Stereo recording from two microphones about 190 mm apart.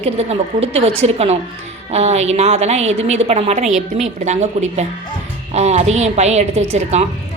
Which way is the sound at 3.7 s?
Centre (ahead or behind).